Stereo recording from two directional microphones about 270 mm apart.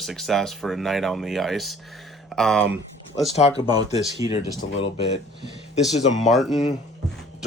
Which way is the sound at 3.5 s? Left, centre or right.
Centre.